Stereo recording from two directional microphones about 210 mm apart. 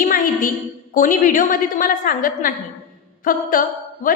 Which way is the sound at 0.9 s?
40° left (ahead or behind).